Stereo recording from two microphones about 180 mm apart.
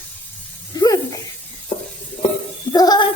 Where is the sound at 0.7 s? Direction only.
20° left (ahead or behind).